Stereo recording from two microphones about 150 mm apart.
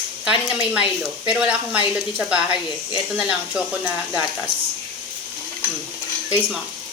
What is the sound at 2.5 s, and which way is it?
Speech, 30° left (ahead or behind).